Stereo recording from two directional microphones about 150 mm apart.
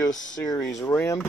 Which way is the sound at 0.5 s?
20° left (ahead or behind).